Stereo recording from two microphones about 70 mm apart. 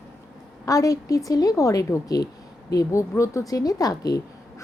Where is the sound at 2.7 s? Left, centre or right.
Left.